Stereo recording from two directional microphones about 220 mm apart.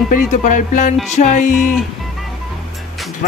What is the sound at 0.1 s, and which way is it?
Speech, 35° left (ahead or behind).